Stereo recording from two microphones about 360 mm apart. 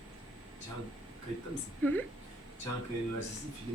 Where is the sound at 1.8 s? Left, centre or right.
Centre.